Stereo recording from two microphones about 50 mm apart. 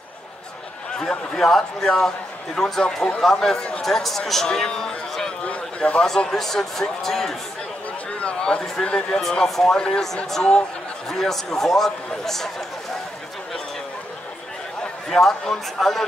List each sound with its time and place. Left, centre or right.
1.3 s a man's voice: centre
5.4 s a sound: left
6.0 s a man's voice: centre
8.2 s a man's voice: left
14.8 s a man's voice: centre